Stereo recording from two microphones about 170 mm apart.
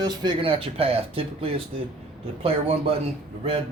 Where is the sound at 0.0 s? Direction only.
25° right (ahead or behind).